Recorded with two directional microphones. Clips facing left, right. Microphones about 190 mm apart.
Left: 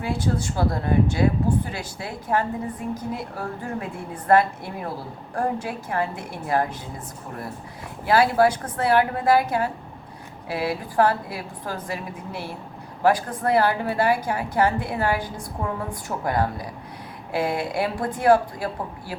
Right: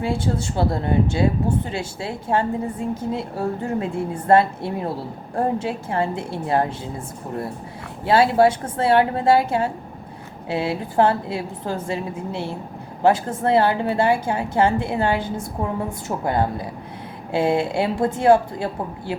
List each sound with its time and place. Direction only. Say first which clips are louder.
0.0 s speech: right 2 dB; 25° right (ahead or behind)
8.0 s speech: right 3 dB; 25° right (ahead or behind)